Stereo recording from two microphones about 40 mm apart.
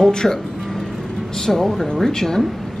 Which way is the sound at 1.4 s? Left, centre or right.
Centre.